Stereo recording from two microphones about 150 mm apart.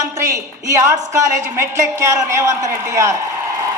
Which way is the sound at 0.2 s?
20° right (ahead or behind).